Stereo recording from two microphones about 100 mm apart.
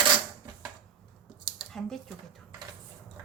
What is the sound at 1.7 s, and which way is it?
Speech, 5° left (ahead or behind).